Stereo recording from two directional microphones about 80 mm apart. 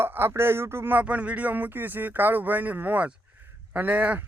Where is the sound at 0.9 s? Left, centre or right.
Centre.